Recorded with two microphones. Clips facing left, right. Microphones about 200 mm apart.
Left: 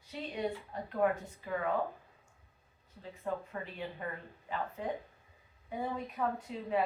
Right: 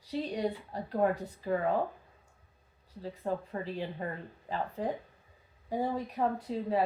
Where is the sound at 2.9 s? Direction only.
35° right (ahead or behind).